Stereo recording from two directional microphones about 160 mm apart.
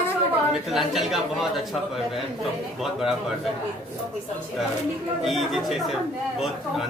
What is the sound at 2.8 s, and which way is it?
Speech, centre (ahead or behind).